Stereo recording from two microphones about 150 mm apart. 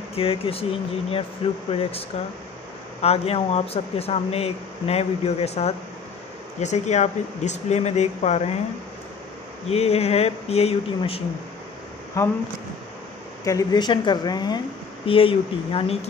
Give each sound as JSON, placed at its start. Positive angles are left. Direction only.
{"t": 0.1, "sound": "speech", "side_deg": 40}
{"t": 9.7, "sound": "speech", "side_deg": 45}
{"t": 12.2, "sound": "speech", "side_deg": 20}
{"t": 13.4, "sound": "speech", "side_deg": 25}